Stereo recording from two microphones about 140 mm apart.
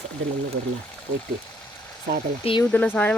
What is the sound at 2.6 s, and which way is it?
Speech, 10° left (ahead or behind).